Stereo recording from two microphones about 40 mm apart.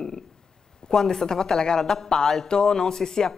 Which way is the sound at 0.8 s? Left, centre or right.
Centre.